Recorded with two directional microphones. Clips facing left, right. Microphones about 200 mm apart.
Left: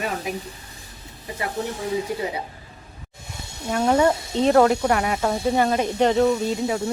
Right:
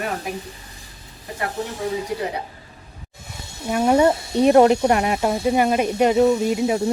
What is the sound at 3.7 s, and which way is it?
Speech, 10° right (ahead or behind).